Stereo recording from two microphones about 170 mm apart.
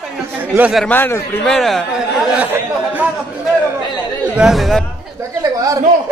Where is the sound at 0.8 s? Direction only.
10° left (ahead or behind).